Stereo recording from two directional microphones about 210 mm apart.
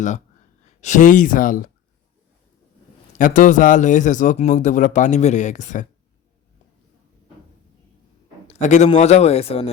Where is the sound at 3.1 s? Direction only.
40° left (ahead or behind).